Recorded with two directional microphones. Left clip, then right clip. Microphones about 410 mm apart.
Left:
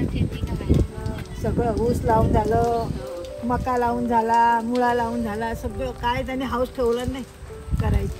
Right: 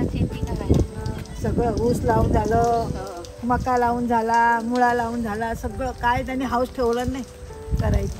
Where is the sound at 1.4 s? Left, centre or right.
Centre.